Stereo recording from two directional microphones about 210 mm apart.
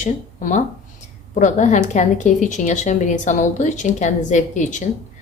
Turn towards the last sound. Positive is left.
turn(degrees=35)  # may be behind; listen again after turning